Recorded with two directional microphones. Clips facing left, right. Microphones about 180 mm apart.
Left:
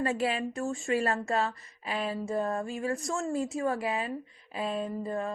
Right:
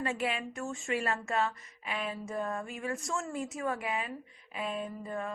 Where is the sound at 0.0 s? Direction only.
35° left (ahead or behind).